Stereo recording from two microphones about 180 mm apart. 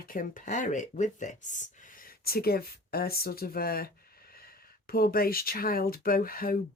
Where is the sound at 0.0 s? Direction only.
50° left (ahead or behind).